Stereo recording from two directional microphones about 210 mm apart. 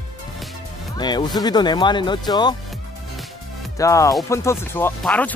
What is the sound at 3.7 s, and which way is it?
Music, 15° left (ahead or behind).